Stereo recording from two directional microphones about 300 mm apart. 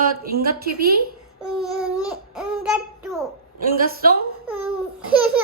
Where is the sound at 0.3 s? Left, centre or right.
Right.